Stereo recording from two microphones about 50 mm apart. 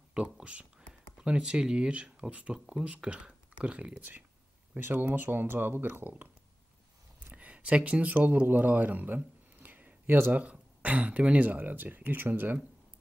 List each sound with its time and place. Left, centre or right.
0.1 s speech: right
4.7 s speech: right
7.3 s speech: right
10.3 s speech: right